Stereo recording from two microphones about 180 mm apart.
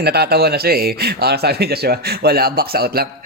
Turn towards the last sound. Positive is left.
turn(degrees=-60)  # may be behind; listen again after turning